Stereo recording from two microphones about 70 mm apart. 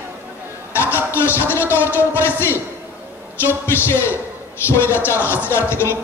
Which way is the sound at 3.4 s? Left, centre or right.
Left.